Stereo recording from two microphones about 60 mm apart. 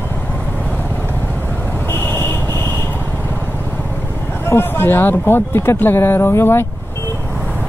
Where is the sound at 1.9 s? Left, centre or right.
Left.